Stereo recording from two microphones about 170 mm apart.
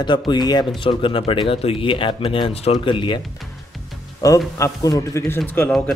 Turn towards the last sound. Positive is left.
turn(degrees=10)  # may be behind; listen again after turning